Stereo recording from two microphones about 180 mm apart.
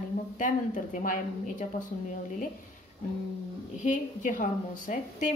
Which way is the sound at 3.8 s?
45° left (ahead or behind).